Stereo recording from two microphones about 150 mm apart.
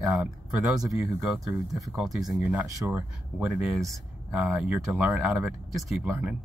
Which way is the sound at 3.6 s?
Centre (ahead or behind).